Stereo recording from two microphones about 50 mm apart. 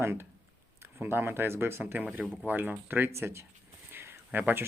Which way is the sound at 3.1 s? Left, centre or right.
Right.